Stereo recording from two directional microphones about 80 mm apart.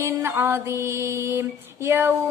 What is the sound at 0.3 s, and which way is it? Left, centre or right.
Music, right.